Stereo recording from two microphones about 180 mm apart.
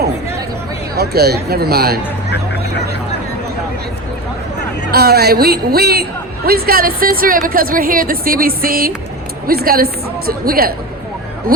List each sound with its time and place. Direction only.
0.9 s a woman's voice: 60° right (ahead or behind)
4.9 s a woman's voice: 60° right (ahead or behind)